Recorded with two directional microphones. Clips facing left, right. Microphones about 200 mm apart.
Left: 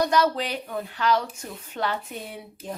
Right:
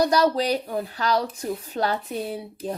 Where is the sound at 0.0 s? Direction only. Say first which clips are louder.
Right 3 dB; 35° right (ahead or behind).